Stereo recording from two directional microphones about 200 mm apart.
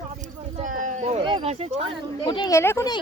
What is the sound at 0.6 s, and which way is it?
Speech, 40° right (ahead or behind).